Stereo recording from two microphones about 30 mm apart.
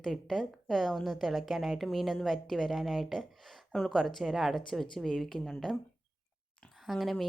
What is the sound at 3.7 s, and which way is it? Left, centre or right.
Speech, centre.